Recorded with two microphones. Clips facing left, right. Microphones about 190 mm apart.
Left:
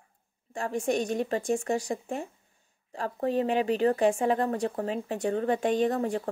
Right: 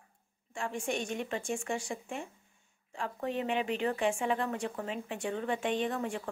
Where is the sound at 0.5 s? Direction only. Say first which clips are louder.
Left 7 dB; 40° left (ahead or behind).